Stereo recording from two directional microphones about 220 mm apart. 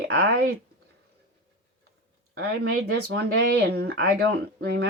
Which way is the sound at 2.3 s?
45° right (ahead or behind).